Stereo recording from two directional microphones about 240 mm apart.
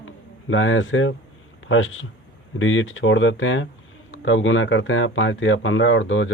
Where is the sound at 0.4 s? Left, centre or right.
Left.